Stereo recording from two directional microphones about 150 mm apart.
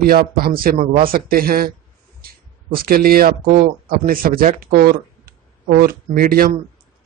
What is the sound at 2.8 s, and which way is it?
Speech, 80° right.